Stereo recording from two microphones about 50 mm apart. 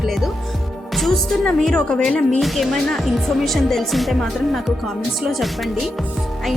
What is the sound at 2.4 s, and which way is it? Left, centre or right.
Music, centre.